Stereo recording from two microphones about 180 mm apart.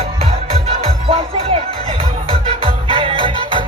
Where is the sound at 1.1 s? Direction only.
30° right (ahead or behind).